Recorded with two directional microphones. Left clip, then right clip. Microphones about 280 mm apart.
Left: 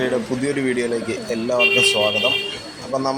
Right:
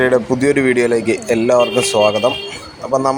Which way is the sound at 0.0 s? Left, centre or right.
Centre.